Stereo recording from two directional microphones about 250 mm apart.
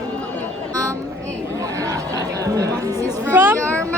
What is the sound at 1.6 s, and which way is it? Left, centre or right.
Chatter, centre.